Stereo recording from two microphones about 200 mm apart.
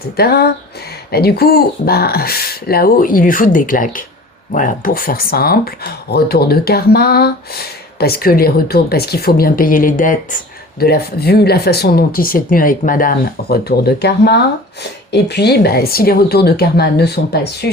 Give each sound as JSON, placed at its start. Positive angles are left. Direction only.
{"t": 0.2, "sound": "speech", "side_deg": 50}